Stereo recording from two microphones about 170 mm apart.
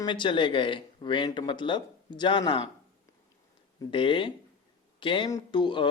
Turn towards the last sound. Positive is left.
turn(degrees=30)  # may be behind; listen again after turning